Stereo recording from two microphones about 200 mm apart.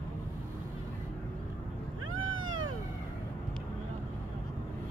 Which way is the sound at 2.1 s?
85° right.